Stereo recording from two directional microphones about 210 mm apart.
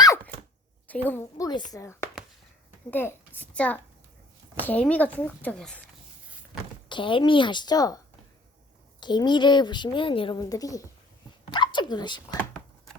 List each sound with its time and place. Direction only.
0.9 s speech: 10° left (ahead or behind)
6.8 s a woman's voice: 25° left (ahead or behind)
9.0 s a woman's voice: 20° left (ahead or behind)